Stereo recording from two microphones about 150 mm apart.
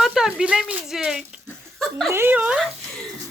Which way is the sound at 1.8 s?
Centre (ahead or behind).